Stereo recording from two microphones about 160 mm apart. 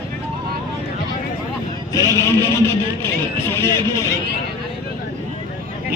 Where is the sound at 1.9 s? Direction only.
20° left (ahead or behind).